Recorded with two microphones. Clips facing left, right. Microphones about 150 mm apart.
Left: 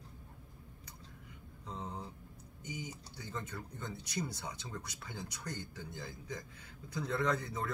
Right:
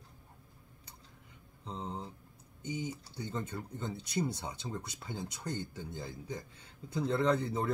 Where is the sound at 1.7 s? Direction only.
30° right (ahead or behind).